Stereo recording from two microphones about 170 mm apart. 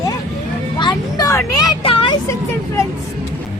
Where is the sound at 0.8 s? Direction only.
25° left (ahead or behind).